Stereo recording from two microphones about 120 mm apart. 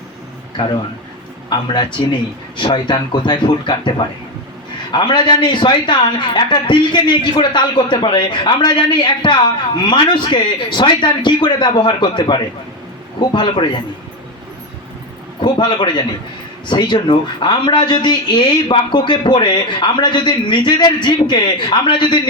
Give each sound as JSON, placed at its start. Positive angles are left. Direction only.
{"t": 1.5, "sound": "speech", "side_deg": 40}
{"t": 15.4, "sound": "speech", "side_deg": 40}